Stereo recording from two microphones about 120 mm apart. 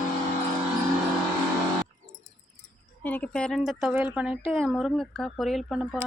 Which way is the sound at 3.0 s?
15° left (ahead or behind).